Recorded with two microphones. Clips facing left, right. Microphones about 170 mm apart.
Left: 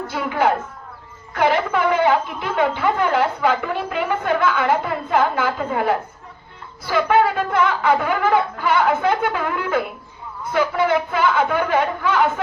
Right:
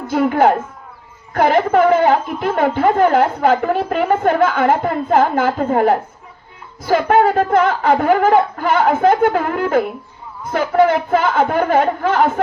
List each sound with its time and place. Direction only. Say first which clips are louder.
0.1 s a woman's voice: right 7 dB; 50° right (ahead or behind)